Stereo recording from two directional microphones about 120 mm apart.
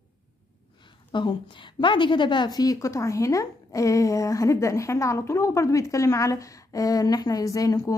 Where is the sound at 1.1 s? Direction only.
40° left (ahead or behind).